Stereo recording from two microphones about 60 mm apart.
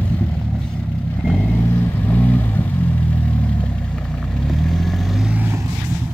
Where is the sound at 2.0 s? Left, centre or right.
Left.